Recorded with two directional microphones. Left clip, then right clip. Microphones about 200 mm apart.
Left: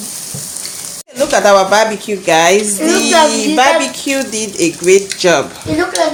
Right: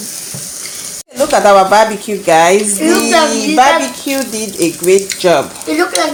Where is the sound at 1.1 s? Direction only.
10° right (ahead or behind).